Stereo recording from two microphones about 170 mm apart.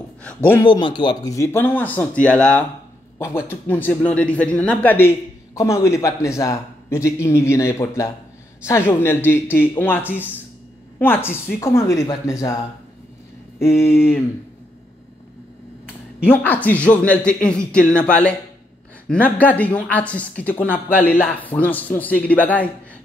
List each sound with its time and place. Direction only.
0.7 s a man's voice: 30° left (ahead or behind)
13.6 s a man's voice: 15° left (ahead or behind)
16.3 s a man's voice: 10° left (ahead or behind)